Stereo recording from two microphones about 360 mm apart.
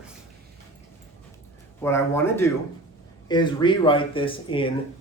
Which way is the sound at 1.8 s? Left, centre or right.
Centre.